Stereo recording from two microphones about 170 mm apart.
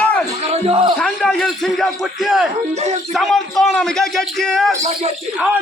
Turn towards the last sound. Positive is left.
turn(degrees=0)  # may be behind; listen again after turning